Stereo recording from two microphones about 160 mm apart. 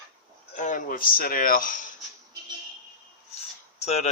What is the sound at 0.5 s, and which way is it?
Speech, 55° left (ahead or behind).